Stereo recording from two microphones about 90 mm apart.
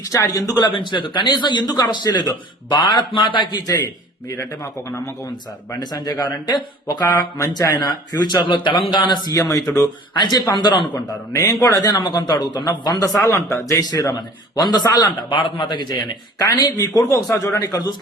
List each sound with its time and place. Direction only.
0.1 s a man's voice: 40° left (ahead or behind)
0.7 s a man's voice: 60° left (ahead or behind)
3.7 s a man's voice: 45° left (ahead or behind)
5.8 s a man's voice: 50° left (ahead or behind)
7.3 s a man's voice: 40° left (ahead or behind); by 9.3 s 55° left (ahead or behind)
9.3 s a man's voice: 40° left (ahead or behind); by 11.0 s 55° left (ahead or behind)
11.3 s a man's voice: 35° left (ahead or behind); by 12.6 s 55° left (ahead or behind)
13.0 s a man's voice: 35° left (ahead or behind)
14.6 s a man's voice: 50° left (ahead or behind)
16.8 s a man's voice: 40° left (ahead or behind)